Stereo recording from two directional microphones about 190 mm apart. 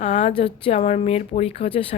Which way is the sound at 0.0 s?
35° left (ahead or behind).